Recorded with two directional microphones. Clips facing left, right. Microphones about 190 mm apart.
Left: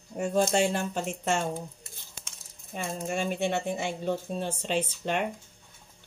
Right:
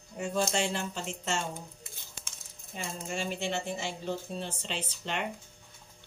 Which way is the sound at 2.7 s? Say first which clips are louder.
Left 5 dB; 55° left (ahead or behind).